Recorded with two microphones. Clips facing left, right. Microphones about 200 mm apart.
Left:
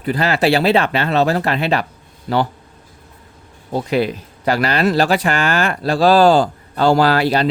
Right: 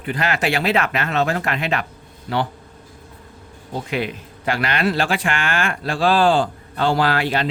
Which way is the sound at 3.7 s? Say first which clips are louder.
Left 7 dB; 35° left (ahead or behind).